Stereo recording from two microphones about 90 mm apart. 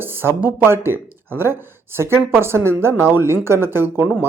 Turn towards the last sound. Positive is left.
turn(degrees=-25)  # may be behind; listen again after turning